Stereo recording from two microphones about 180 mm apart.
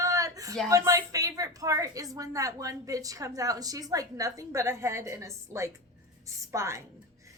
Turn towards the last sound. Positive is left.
turn(degrees=-15)  # may be behind; listen again after turning